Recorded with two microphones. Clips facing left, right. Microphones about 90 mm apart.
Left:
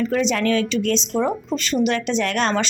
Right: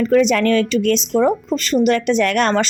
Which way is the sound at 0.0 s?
55° right (ahead or behind).